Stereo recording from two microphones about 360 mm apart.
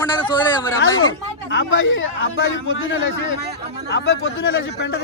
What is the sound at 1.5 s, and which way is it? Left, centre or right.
A man's voice, left.